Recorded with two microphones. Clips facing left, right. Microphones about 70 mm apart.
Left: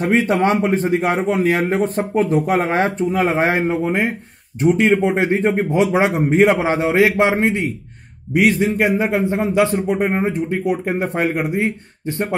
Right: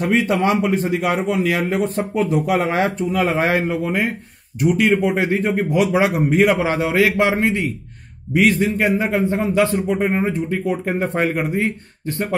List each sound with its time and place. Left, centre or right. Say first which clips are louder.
0.0 s a man's voice: left 1 dB; left; by 11.7 s centre